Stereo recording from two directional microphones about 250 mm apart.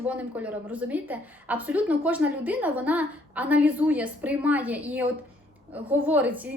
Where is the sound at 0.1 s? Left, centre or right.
Centre.